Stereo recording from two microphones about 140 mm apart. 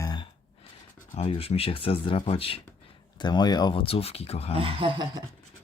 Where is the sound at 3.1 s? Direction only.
30° left (ahead or behind).